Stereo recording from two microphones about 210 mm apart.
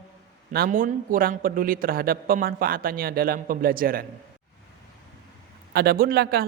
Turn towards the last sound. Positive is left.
turn(degrees=-45)  # may be behind; listen again after turning